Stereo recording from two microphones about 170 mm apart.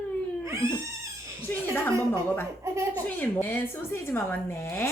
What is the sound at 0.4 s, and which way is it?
Cat, 15° right (ahead or behind).